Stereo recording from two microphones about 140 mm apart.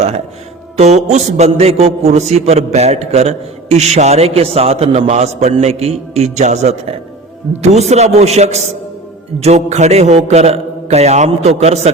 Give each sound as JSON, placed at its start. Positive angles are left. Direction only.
{"t": 0.8, "sound": "a man's voice", "side_deg": -55}